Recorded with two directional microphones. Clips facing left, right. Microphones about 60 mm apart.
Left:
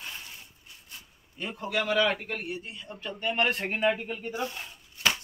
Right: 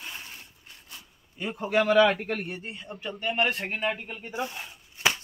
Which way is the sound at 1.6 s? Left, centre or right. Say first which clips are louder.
Right 6 dB; right.